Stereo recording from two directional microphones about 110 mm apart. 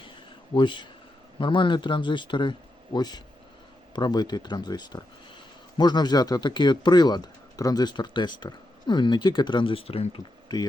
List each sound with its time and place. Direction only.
0.5 s speech: 45° left (ahead or behind); by 10.2 s 60° left (ahead or behind)
10.5 s speech: 40° left (ahead or behind)